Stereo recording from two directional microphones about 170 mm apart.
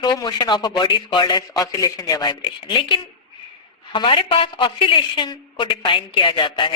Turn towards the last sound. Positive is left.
turn(degrees=30)  # may be behind; listen again after turning